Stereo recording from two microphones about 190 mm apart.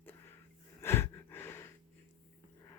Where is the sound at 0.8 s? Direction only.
10° left (ahead or behind).